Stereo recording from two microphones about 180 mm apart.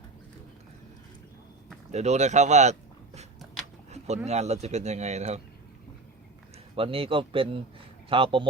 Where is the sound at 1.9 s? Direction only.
40° right (ahead or behind).